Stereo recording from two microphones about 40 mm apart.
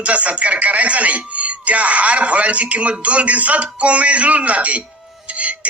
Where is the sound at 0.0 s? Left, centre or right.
Right.